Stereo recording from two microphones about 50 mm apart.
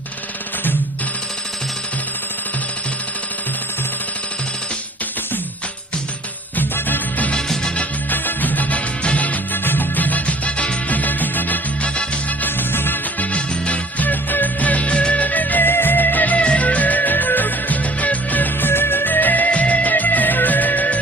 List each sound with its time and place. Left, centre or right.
6.6 s music: left
10.9 s music: left
13.1 s music: left
18.7 s music: left